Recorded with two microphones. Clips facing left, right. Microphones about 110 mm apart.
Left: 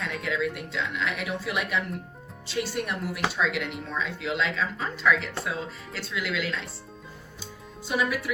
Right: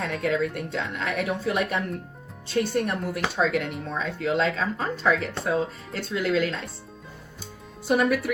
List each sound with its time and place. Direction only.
0.0 s speech: 45° right (ahead or behind)
7.9 s speech: 50° right (ahead or behind)